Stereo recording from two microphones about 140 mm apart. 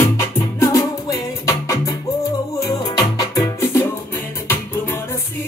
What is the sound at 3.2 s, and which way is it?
Music, 20° left (ahead or behind).